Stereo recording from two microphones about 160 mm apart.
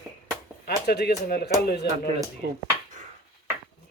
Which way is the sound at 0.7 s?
80° left.